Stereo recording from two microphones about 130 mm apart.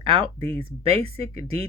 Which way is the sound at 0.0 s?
40° right (ahead or behind).